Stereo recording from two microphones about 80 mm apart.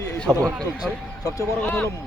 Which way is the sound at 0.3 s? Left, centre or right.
Centre.